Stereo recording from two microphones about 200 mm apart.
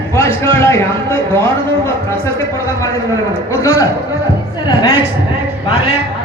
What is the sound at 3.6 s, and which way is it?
Speech, 15° left (ahead or behind).